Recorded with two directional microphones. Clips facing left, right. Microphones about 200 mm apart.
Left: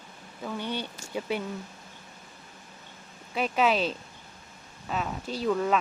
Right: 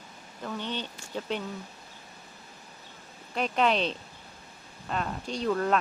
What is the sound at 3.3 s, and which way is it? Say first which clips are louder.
Speech: left 1 dB; 5° left (ahead or behind).